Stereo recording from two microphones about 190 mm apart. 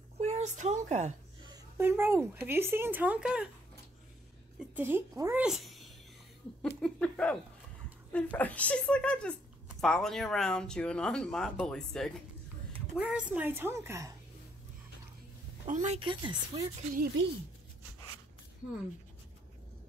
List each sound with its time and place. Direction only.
0.2 s a woman's voice: 35° right (ahead or behind)
1.8 s a woman's voice: 10° right (ahead or behind)
4.7 s a woman's voice: 10° right (ahead or behind)
5.4 s a woman's voice: centre (ahead or behind)
15.6 s speech: 40° right (ahead or behind); by 16.6 s 25° right (ahead or behind)